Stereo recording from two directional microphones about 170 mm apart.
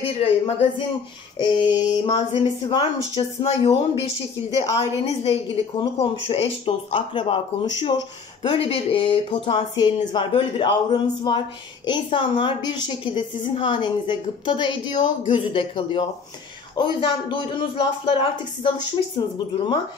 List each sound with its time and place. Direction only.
0.0 s a woman's voice: 35° left (ahead or behind)